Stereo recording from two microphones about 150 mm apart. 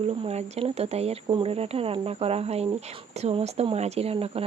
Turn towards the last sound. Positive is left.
turn(degrees=-40)  # may be behind; listen again after turning